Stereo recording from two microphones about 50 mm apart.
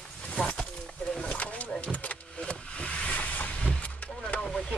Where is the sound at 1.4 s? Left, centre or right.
Left.